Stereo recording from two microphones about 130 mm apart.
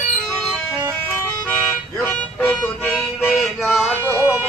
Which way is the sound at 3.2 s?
10° left (ahead or behind).